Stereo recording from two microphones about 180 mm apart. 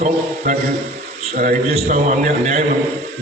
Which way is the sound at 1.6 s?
35° right (ahead or behind).